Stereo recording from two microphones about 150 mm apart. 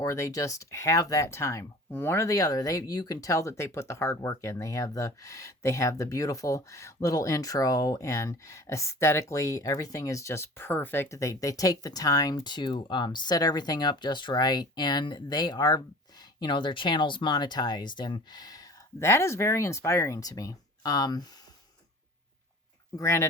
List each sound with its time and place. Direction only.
0.0 s speech: 20° left (ahead or behind)
23.0 s speech: 20° left (ahead or behind)